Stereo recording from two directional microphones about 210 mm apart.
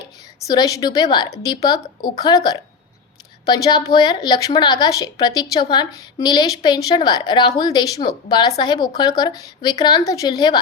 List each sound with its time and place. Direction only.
0.4 s a woman's voice: 15° left (ahead or behind)